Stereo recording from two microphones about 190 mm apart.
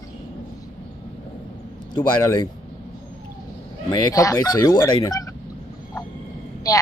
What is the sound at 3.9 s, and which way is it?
Speech, 20° left (ahead or behind).